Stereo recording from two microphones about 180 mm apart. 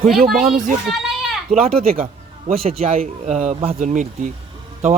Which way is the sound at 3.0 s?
40° right (ahead or behind).